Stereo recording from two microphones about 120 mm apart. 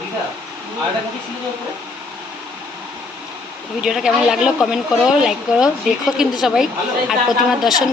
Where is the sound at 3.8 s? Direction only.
5° right (ahead or behind).